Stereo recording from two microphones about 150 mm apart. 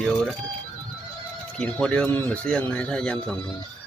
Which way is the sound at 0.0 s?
5° left (ahead or behind).